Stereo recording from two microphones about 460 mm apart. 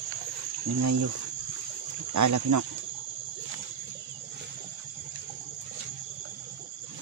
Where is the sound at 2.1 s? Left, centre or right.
Right.